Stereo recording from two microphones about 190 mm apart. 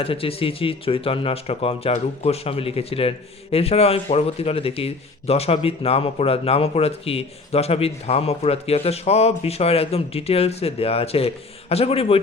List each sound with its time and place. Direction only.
0.0 s speech: 30° left (ahead or behind)